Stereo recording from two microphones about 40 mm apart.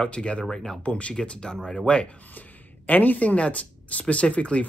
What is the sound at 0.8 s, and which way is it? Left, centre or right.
Speech, left.